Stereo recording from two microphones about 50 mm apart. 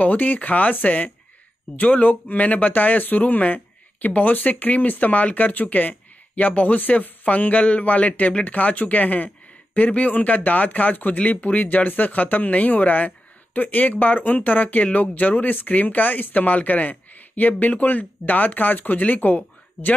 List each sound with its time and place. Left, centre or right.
0.0 s speech: left